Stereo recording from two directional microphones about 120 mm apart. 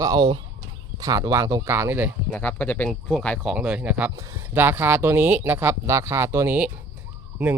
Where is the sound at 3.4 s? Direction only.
5° right (ahead or behind).